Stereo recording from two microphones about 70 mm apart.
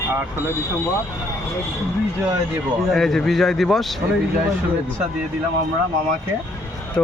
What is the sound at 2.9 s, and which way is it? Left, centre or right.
Speech, centre.